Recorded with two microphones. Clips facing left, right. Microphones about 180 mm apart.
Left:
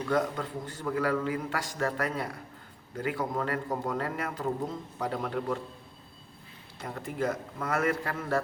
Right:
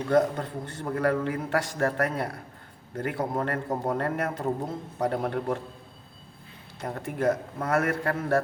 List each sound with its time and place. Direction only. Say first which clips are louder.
0.1 s a man's voice: right 6 dB; 50° right (ahead or behind)
0.6 s a man's voice: right 3 dB; 65° right (ahead or behind)
0.9 s a man's voice: right 3 dB; 50° right (ahead or behind)
6.8 s a man's voice: right 5 dB; 55° right (ahead or behind)